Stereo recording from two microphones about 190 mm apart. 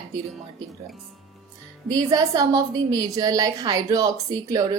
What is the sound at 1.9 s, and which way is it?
A woman's voice, 20° right (ahead or behind).